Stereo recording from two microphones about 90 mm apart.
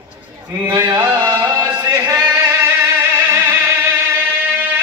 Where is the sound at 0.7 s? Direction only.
45° right (ahead or behind).